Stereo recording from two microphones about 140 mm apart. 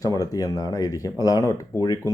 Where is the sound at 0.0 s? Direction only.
25° left (ahead or behind).